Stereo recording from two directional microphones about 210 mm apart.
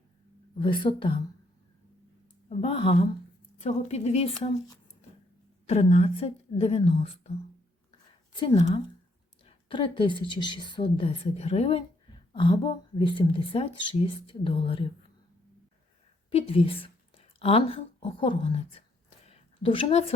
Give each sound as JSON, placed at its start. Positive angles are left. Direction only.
{"t": 0.6, "sound": "a woman's voice", "side_deg": 20}
{"t": 2.5, "sound": "a woman's voice", "side_deg": 25}
{"t": 5.6, "sound": "a woman's voice", "side_deg": 30}
{"t": 8.4, "sound": "a woman's voice", "side_deg": 25}
{"t": 16.3, "sound": "speech", "side_deg": 25}
{"t": 19.2, "sound": "a sound", "side_deg": 30}